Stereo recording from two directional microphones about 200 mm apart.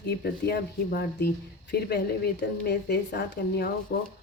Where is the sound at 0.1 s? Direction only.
50° left (ahead or behind).